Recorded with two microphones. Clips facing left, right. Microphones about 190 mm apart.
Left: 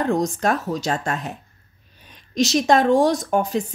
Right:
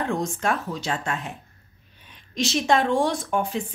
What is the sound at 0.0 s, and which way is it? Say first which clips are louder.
A woman's voice: left 5 dB; 40° left (ahead or behind).